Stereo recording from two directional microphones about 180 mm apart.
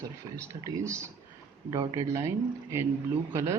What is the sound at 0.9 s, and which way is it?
Speech, 15° right (ahead or behind).